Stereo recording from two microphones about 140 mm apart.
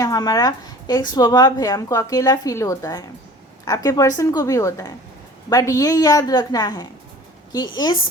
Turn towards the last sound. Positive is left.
turn(degrees=30)  # may be behind; listen again after turning